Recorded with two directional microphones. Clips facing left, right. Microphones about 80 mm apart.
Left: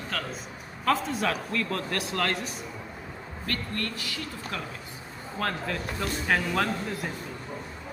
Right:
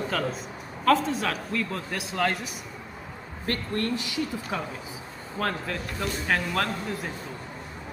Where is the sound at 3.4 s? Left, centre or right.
Right.